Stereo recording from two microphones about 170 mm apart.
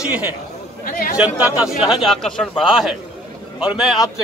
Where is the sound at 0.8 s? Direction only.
55° left (ahead or behind).